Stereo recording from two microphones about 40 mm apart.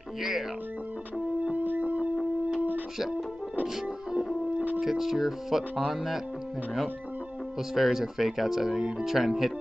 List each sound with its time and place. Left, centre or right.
1.6 s music: right
4.8 s speech: centre
7.7 s speech: centre